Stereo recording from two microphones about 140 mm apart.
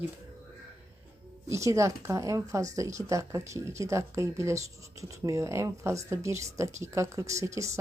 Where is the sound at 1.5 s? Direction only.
20° right (ahead or behind).